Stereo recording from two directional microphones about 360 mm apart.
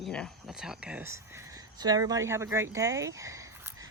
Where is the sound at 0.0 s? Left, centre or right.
Centre.